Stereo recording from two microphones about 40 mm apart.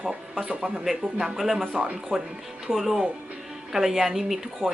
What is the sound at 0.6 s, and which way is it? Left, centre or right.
Speech, centre.